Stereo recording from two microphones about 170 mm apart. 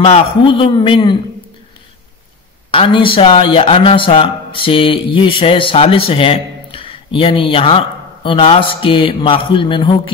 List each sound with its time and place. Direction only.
0.0 s a man's voice: 35° left (ahead or behind)
2.7 s a man's voice: 30° left (ahead or behind)